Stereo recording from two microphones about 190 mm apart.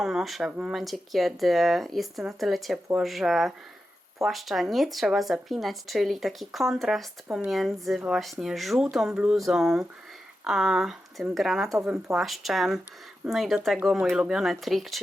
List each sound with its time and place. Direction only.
0.0 s speech: centre (ahead or behind)